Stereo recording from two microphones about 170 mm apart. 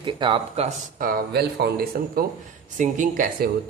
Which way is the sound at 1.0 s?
65° right (ahead or behind).